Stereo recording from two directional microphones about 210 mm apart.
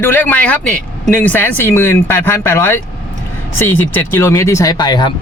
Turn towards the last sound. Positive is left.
turn(degrees=20)  # may be behind; listen again after turning